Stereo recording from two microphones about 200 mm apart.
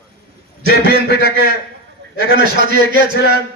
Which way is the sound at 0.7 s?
50° left (ahead or behind).